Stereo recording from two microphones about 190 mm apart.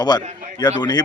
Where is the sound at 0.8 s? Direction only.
20° left (ahead or behind).